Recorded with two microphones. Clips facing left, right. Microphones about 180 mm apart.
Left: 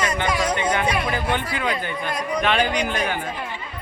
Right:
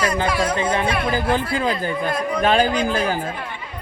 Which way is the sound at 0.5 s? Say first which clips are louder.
Right 1 dB; 30° right (ahead or behind).